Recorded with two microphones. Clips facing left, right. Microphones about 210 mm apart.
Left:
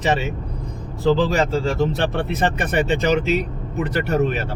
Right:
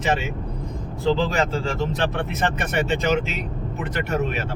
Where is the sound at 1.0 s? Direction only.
40° left (ahead or behind).